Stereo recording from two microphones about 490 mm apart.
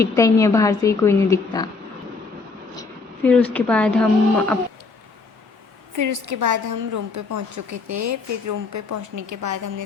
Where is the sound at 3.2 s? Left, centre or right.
Centre.